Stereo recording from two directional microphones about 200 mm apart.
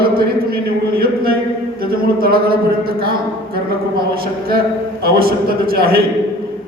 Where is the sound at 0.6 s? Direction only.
50° right (ahead or behind).